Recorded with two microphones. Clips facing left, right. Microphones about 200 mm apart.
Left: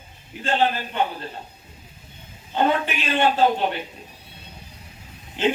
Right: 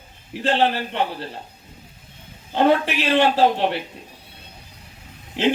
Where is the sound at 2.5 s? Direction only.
75° right (ahead or behind).